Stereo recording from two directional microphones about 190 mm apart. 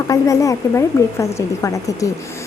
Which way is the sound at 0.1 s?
15° left (ahead or behind).